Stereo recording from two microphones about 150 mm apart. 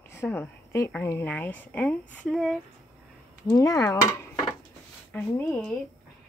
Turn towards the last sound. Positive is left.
turn(degrees=5)  # may be behind; listen again after turning